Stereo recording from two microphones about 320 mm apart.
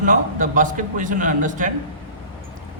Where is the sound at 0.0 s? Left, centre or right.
Right.